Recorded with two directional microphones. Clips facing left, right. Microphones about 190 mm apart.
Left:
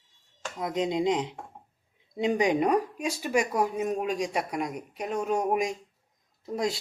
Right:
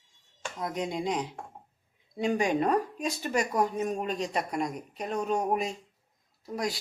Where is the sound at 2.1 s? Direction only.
20° left (ahead or behind).